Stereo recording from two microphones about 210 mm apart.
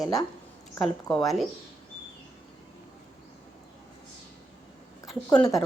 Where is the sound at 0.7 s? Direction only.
Centre (ahead or behind).